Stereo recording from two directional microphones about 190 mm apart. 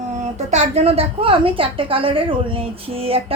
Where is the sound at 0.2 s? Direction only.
35° right (ahead or behind).